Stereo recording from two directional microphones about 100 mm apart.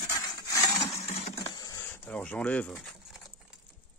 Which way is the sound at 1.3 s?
45° left (ahead or behind).